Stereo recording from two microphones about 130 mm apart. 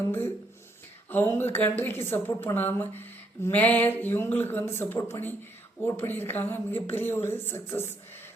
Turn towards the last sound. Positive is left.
turn(degrees=15)  # may be behind; listen again after turning